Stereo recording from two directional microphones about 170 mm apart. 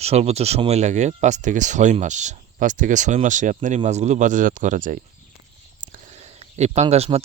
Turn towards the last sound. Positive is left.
turn(degrees=-40)  # may be behind; listen again after turning